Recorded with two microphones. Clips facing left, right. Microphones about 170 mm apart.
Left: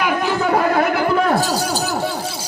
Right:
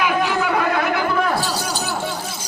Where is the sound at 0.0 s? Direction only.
40° left (ahead or behind).